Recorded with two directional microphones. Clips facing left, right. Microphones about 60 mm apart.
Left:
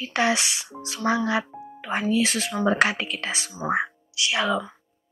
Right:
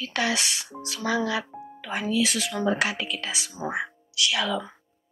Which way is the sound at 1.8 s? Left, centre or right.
Left.